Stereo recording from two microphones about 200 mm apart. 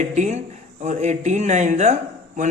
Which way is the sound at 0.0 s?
35° right (ahead or behind).